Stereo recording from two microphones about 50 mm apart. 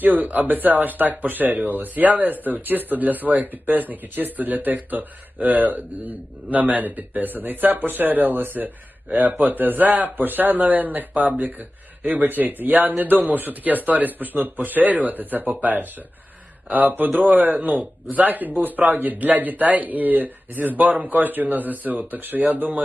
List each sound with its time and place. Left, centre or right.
0.0 s speech: right